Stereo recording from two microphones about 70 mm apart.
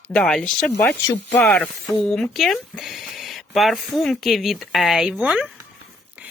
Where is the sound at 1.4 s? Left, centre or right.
Left.